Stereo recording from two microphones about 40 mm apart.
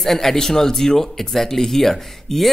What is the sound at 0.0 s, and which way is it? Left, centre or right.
Speech, centre.